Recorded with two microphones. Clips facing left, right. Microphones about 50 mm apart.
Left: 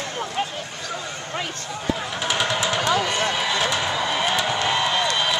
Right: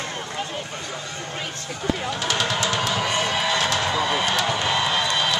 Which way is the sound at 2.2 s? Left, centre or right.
Centre.